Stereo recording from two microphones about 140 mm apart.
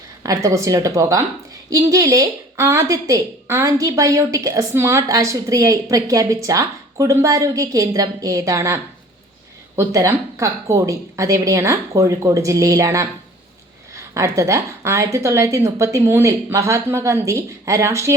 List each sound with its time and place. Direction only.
0.2 s a woman's voice: 25° right (ahead or behind)